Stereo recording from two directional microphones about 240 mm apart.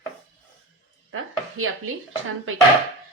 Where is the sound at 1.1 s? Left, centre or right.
Right.